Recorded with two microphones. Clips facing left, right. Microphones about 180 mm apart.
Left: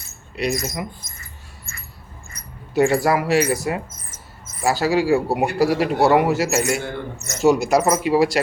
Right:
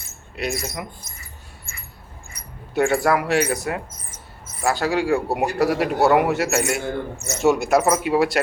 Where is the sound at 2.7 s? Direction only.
Centre (ahead or behind).